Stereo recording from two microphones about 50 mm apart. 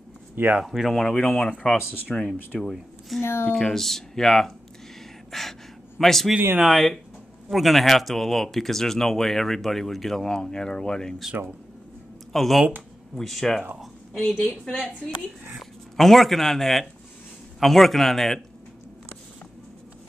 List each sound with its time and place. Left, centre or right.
0.7 s speech: centre
0.9 s speech: centre
1.2 s speech: left
3.2 s speech: left
3.5 s speech: centre
5.3 s gasp: centre
6.6 s speech: centre
12.3 s speech: centre
16.0 s speech: centre